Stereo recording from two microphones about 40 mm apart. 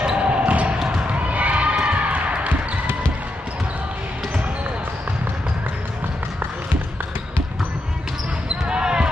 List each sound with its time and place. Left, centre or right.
0.0 s basketball bounce: right
0.5 s basketball bounce: right
0.7 s basketball bounce: centre
1.0 s basketball bounce: right
8.6 s basketball bounce: right